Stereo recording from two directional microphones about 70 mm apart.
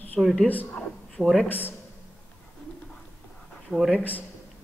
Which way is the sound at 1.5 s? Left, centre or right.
Left.